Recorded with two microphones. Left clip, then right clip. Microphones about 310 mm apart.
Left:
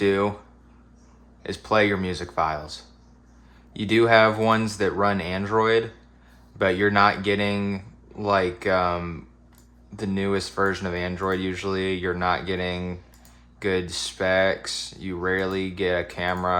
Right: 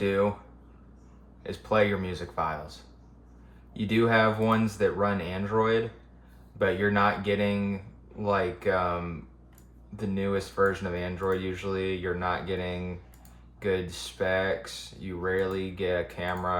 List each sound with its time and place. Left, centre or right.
0.0 s speech: left
1.5 s speech: left
3.8 s speech: left